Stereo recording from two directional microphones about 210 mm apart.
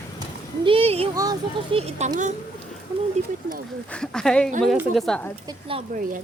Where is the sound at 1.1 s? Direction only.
15° right (ahead or behind); by 2.3 s 35° right (ahead or behind).